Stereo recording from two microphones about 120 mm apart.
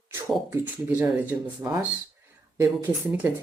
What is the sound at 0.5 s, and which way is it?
Speech, 15° right (ahead or behind).